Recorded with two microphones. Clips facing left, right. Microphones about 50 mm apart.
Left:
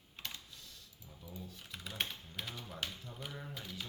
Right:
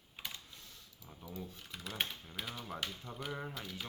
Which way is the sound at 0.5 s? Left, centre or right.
Right.